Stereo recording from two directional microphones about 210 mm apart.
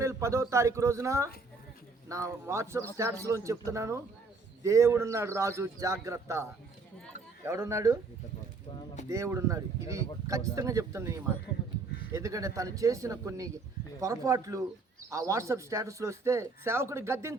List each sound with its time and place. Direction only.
0.0 s speech: 15° right (ahead or behind)
9.0 s speech: 15° right (ahead or behind)